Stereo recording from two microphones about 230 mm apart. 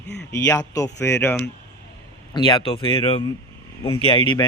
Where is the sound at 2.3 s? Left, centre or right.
Centre.